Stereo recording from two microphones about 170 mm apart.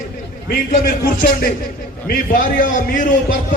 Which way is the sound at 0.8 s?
55° left (ahead or behind).